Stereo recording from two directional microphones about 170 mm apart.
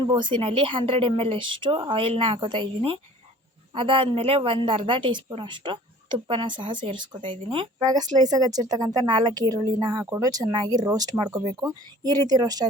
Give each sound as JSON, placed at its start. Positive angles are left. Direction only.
{"t": 0.0, "sound": "speech", "side_deg": -30}